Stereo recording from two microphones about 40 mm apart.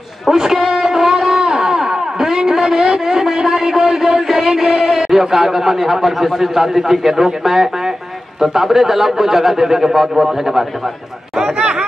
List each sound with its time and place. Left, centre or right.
0.3 s a sound: centre
4.5 s a man's voice: centre
11.5 s speech: right